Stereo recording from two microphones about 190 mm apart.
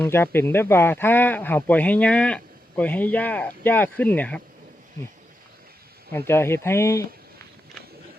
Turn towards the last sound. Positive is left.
turn(degrees=15)  # may be behind; listen again after turning